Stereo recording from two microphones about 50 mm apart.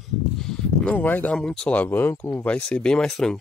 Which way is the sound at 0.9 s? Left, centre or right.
Left.